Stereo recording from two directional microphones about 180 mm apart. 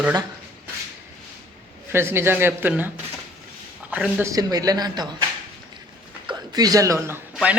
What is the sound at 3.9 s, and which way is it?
Speech, 10° right (ahead or behind).